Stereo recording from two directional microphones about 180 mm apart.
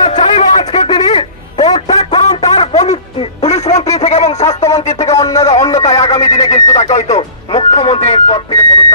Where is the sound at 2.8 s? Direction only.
35° left (ahead or behind).